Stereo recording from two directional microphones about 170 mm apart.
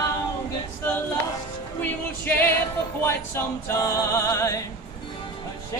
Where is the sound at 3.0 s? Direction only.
15° left (ahead or behind).